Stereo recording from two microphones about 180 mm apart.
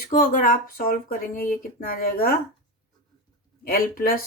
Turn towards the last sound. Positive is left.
turn(degrees=55)  # may be behind; listen again after turning